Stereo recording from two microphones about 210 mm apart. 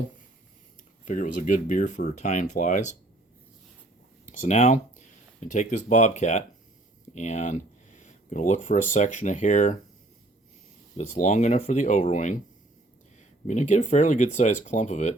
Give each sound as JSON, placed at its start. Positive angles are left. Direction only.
{"t": 1.0, "sound": "speech", "side_deg": 40}
{"t": 4.3, "sound": "speech", "side_deg": 35}
{"t": 10.9, "sound": "speech", "side_deg": 35}
{"t": 13.5, "sound": "speech", "side_deg": 35}